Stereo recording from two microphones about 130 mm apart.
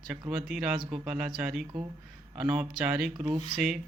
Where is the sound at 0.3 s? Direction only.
5° right (ahead or behind).